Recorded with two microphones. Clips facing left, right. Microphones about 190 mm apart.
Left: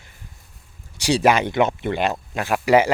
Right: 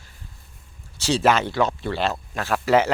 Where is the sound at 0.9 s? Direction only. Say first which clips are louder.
Left 2 dB; 15° left (ahead or behind).